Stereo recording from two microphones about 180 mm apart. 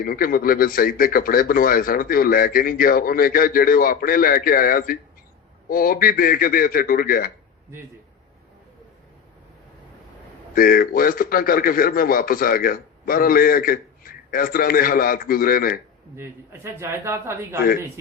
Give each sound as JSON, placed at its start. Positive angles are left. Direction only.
{"t": 0.0, "sound": "a man's voice", "side_deg": 55}
{"t": 10.5, "sound": "a man's voice", "side_deg": 50}
{"t": 16.1, "sound": "speech", "side_deg": -15}